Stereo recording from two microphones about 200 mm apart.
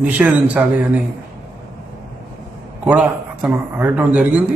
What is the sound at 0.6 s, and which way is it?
Speech, 5° right (ahead or behind).